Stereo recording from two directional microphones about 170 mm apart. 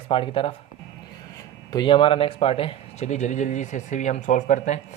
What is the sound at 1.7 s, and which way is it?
Speech, 30° left (ahead or behind).